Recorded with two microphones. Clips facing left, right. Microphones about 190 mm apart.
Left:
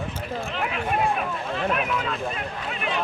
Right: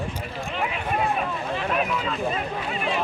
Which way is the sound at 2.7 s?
Centre (ahead or behind).